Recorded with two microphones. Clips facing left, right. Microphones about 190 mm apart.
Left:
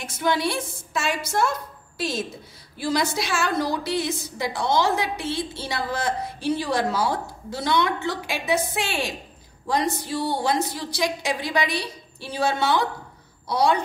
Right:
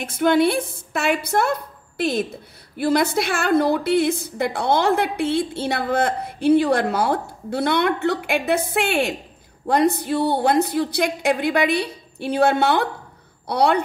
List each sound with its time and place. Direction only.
0.0 s a woman's voice: 55° right (ahead or behind)